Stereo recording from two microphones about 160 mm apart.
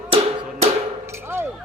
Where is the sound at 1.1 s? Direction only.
15° right (ahead or behind).